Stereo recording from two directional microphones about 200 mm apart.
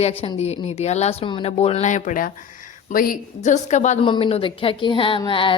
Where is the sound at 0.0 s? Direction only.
25° left (ahead or behind).